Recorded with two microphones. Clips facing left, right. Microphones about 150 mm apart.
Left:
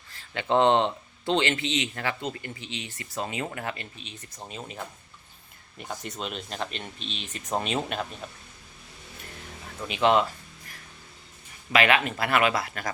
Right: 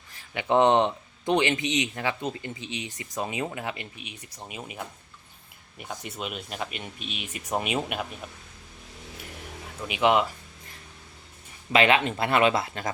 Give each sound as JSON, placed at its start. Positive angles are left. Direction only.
{"t": 0.1, "sound": "speech", "side_deg": -15}
{"t": 6.0, "sound": "speech", "side_deg": -5}
{"t": 9.8, "sound": "speech", "side_deg": -15}
{"t": 11.7, "sound": "speech", "side_deg": -25}